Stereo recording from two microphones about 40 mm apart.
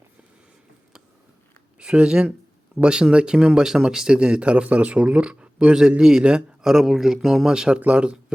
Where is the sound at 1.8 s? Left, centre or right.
Right.